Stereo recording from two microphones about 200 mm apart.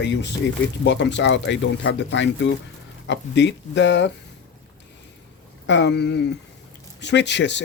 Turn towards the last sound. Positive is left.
turn(degrees=60)  # may be behind; listen again after turning